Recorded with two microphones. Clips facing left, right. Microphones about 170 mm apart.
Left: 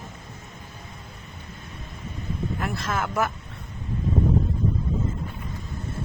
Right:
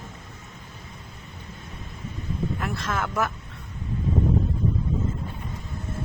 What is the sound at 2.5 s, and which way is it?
Speech, 5° left (ahead or behind).